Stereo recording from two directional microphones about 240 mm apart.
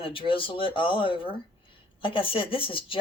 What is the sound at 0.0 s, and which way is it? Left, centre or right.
Speech, left.